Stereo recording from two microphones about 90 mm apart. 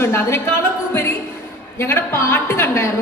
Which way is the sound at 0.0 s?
25° left (ahead or behind).